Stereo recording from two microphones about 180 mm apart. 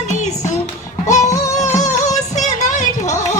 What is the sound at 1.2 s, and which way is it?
Music, 20° left (ahead or behind).